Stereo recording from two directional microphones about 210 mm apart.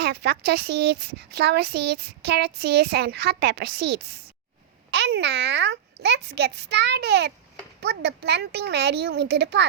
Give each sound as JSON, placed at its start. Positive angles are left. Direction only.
{"t": 0.0, "sound": "a child's voice", "side_deg": -50}